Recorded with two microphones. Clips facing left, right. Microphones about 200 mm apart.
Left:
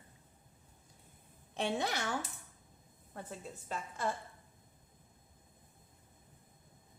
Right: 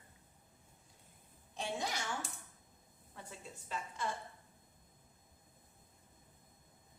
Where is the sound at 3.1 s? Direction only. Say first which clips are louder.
Left 6 dB; 55° left (ahead or behind).